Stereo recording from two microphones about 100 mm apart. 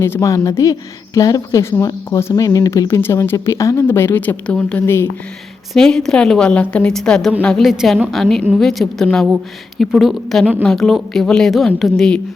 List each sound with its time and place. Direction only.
0.0 s a woman's voice: 30° left (ahead or behind); by 12.2 s 5° left (ahead or behind)